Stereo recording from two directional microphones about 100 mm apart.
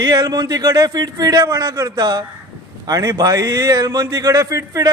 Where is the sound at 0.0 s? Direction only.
40° right (ahead or behind).